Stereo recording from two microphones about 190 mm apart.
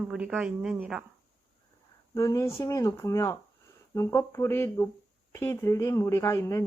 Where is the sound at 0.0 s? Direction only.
5° right (ahead or behind).